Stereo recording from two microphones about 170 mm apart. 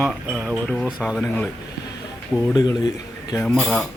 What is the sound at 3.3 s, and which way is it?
Speech, 5° left (ahead or behind).